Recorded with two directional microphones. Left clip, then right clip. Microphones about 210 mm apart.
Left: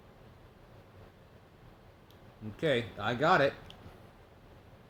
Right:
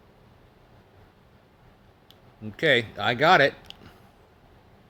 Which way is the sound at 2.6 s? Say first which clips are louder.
Right 9 dB; 45° right (ahead or behind).